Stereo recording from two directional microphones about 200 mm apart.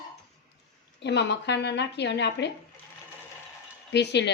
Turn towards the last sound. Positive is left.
turn(degrees=60)  # may be behind; listen again after turning